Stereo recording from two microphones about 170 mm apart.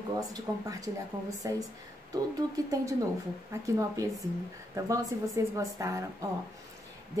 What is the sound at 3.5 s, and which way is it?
A woman's voice, 20° right (ahead or behind).